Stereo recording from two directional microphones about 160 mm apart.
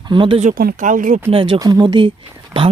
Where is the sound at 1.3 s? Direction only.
35° right (ahead or behind).